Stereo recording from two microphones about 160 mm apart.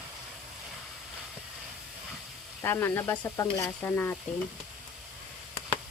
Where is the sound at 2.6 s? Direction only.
15° left (ahead or behind).